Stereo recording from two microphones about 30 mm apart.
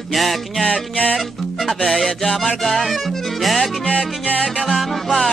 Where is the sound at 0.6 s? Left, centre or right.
Left.